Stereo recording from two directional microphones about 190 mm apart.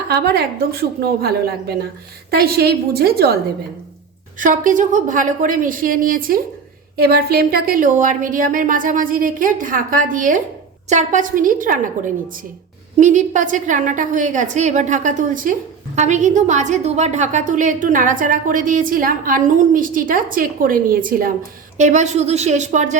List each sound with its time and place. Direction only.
0.1 s a woman's voice: 55° right (ahead or behind)
4.4 s a woman's voice: 45° right (ahead or behind)